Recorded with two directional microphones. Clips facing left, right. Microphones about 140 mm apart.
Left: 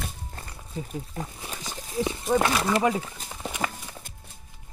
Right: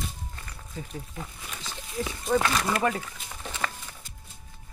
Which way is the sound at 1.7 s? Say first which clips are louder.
Left 4 dB; 35° left (ahead or behind).